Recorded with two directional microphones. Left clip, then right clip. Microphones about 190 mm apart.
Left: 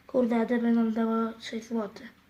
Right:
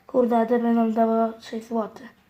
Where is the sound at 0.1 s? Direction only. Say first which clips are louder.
Right 6 dB; 25° right (ahead or behind).